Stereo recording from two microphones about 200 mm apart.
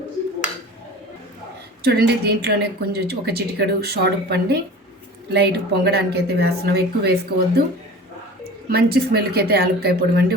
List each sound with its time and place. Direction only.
1.8 s a woman's voice: 55° right (ahead or behind)
8.7 s a woman's voice: 50° right (ahead or behind)